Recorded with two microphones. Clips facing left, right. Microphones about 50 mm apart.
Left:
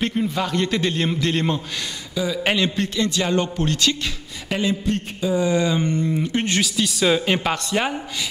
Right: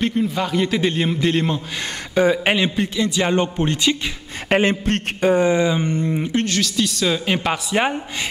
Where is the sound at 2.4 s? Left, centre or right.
Centre.